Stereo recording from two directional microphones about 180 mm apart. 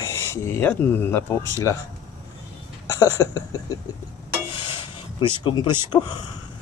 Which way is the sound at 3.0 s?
20° left (ahead or behind).